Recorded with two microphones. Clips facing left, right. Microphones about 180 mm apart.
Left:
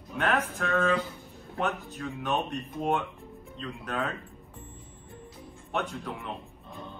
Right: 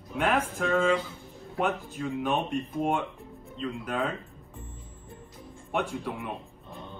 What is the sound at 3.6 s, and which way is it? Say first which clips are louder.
Speech: right 3 dB; 10° right (ahead or behind).